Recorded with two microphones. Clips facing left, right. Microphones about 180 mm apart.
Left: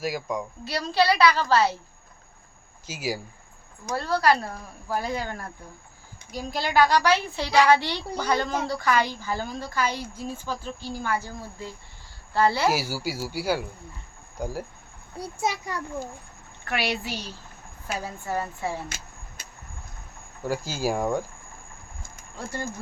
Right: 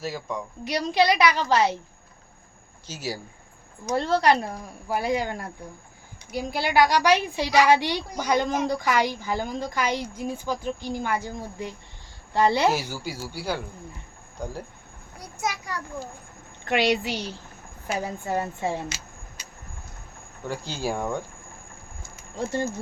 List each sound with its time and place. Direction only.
0.0 s speech: 15° left (ahead or behind)
0.6 s a woman's voice: 15° right (ahead or behind)
2.8 s speech: 10° left (ahead or behind)
3.8 s a woman's voice: 25° right (ahead or behind)
12.9 s speech: 10° left (ahead or behind)
15.2 s a child's voice: 30° left (ahead or behind)
16.6 s a woman's voice: 20° right (ahead or behind)
20.5 s speech: 5° left (ahead or behind)
22.4 s speech: 20° right (ahead or behind)